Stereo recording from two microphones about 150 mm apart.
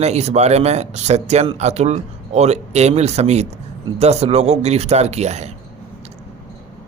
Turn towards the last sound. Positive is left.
turn(degrees=-45)  # may be behind; listen again after turning